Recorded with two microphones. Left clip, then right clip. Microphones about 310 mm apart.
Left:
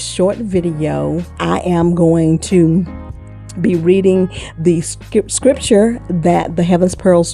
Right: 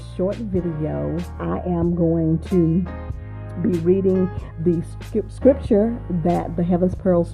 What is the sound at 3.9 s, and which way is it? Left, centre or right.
Speech, left.